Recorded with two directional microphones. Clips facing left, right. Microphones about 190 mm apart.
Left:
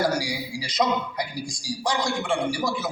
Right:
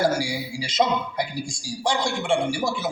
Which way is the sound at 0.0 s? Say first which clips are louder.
Right 2 dB; 25° right (ahead or behind).